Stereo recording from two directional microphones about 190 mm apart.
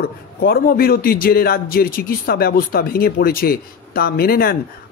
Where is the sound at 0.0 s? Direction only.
55° left (ahead or behind).